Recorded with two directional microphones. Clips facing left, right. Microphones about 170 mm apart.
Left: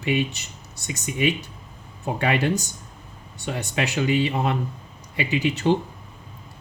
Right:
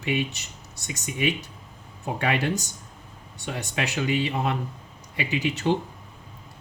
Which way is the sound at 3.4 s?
30° left (ahead or behind).